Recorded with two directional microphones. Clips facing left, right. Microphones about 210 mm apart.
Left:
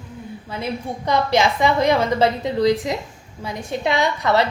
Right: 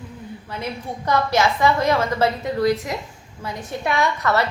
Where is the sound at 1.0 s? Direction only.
15° left (ahead or behind).